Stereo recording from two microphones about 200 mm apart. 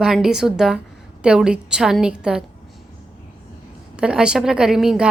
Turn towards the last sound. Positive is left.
turn(degrees=0)  # may be behind; listen again after turning